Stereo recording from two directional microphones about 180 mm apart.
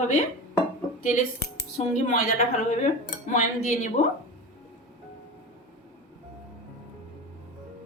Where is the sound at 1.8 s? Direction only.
40° left (ahead or behind).